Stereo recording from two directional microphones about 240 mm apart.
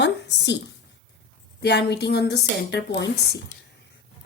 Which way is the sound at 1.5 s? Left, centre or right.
Left.